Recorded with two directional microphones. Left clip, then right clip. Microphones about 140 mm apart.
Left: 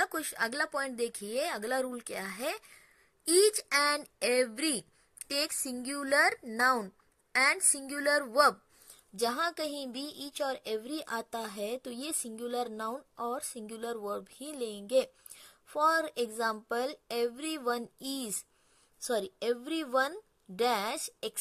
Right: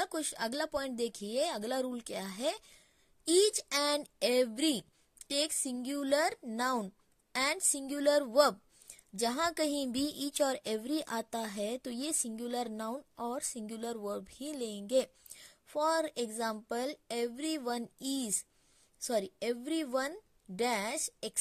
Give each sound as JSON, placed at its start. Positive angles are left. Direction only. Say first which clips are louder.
{"t": 0.0, "sound": "a woman's voice", "louder": "left 4 dB", "side_deg": -40}